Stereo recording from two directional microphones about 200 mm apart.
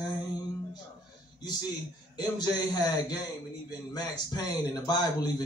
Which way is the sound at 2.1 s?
20° left (ahead or behind).